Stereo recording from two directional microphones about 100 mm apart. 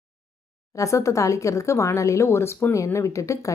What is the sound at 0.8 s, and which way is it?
Speech, 30° left (ahead or behind).